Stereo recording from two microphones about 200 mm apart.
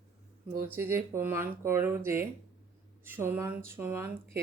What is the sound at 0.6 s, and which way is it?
Speech, 10° right (ahead or behind).